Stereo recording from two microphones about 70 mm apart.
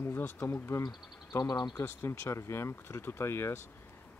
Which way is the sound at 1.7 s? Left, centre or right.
Left.